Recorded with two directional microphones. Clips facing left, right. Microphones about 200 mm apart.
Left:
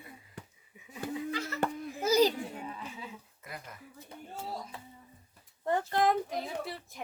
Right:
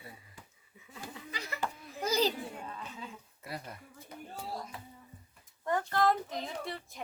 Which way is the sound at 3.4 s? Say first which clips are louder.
Right 4 dB; 30° right (ahead or behind).